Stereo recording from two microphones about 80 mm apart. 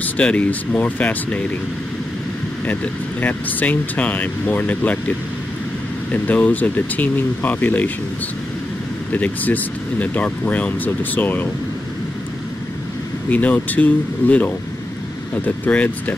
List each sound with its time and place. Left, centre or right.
0.0 s speech: centre
2.6 s speech: left
6.1 s speech: left
9.1 s speech: left
13.3 s speech: centre